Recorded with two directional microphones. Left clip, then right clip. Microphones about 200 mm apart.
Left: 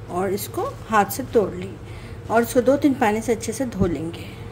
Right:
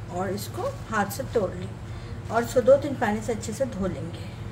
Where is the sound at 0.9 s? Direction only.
45° left (ahead or behind).